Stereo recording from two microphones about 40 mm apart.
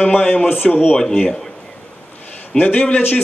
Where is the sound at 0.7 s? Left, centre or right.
Centre.